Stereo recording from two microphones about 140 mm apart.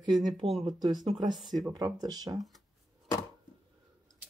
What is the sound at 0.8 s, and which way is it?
Speech, 30° right (ahead or behind).